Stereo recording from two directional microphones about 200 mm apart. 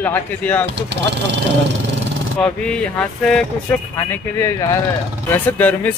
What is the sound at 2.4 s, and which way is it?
Speech, 5° left (ahead or behind).